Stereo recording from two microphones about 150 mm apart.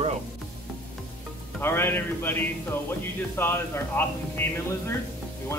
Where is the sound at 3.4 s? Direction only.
15° left (ahead or behind).